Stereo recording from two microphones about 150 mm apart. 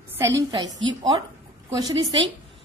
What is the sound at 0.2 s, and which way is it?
A woman's voice, 20° right (ahead or behind).